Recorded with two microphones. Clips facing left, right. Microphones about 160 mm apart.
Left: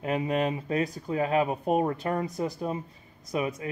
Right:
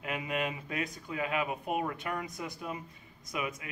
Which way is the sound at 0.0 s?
35° left (ahead or behind).